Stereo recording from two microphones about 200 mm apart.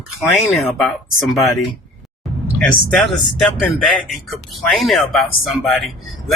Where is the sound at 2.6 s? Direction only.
5° left (ahead or behind).